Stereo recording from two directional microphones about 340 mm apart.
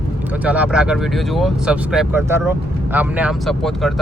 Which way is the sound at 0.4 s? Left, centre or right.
Centre.